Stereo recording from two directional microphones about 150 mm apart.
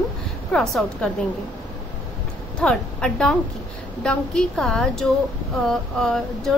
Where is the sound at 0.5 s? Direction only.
5° left (ahead or behind).